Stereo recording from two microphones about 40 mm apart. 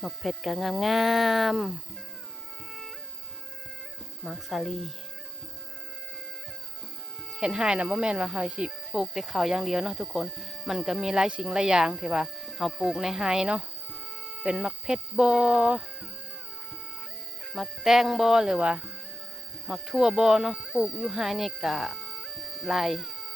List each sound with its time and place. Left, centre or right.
0.0 s speech: centre
4.2 s speech: centre
7.4 s music: centre
8.9 s speech: centre
13.4 s music: right
14.8 s music: centre
17.5 s speech: centre
20.0 s speech: centre
20.8 s speech: centre